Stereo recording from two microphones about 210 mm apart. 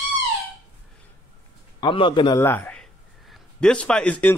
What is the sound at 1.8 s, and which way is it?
Speech, 25° left (ahead or behind).